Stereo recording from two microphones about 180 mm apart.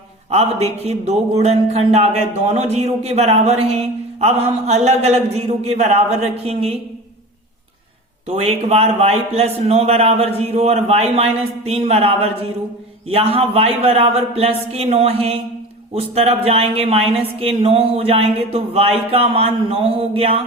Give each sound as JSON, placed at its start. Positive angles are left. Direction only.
{"t": 0.3, "sound": "speech", "side_deg": -35}
{"t": 8.3, "sound": "speech", "side_deg": -35}